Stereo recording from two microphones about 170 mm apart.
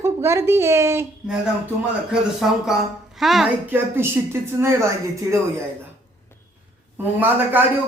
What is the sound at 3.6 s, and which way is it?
A woman's voice, 15° right (ahead or behind).